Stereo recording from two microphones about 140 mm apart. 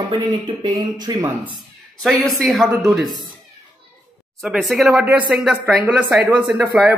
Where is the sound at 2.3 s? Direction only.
Centre (ahead or behind).